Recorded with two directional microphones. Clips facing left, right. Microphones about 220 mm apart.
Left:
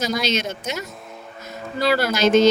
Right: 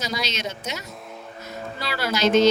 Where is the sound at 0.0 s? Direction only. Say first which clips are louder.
Left 6 dB; 50° left (ahead or behind).